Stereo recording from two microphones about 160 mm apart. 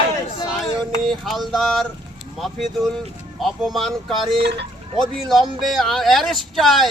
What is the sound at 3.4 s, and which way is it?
Speech, centre (ahead or behind).